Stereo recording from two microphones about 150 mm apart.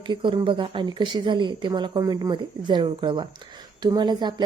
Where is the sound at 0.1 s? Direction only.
30° right (ahead or behind).